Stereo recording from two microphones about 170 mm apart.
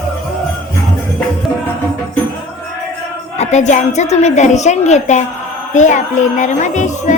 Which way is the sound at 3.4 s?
45° left (ahead or behind).